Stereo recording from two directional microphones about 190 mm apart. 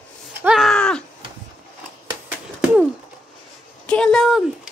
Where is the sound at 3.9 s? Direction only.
5° left (ahead or behind).